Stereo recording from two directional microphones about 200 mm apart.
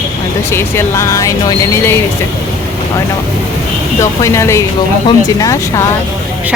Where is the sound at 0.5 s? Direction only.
15° left (ahead or behind).